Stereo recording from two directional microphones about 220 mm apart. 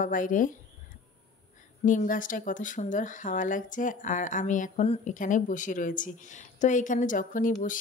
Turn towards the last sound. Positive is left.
turn(degrees=35)  # may be behind; listen again after turning